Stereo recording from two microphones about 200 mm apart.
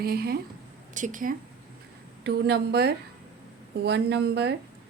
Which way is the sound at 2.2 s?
55° right (ahead or behind).